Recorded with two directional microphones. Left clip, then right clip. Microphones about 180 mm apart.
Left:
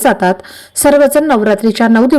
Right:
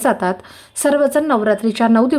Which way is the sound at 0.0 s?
20° left (ahead or behind).